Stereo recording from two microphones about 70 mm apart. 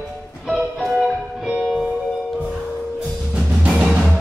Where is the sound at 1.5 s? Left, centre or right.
Centre.